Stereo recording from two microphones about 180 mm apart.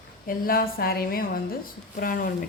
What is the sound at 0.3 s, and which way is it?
A woman's voice, 55° left (ahead or behind).